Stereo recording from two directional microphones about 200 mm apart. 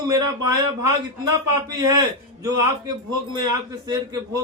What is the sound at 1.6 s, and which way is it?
Speech, 15° right (ahead or behind).